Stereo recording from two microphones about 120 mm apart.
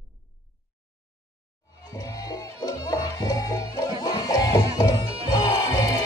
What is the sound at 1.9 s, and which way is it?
Music, 30° left (ahead or behind).